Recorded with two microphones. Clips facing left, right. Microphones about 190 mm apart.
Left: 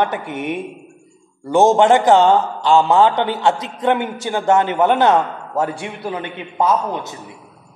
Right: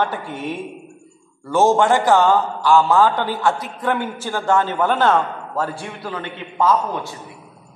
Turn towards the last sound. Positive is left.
turn(degrees=20)  # may be behind; listen again after turning